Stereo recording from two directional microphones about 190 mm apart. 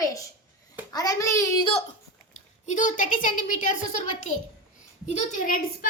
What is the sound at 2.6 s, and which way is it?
A woman's voice, 40° left (ahead or behind).